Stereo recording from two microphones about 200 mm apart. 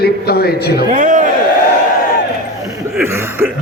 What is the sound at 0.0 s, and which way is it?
Speech, 50° left (ahead or behind).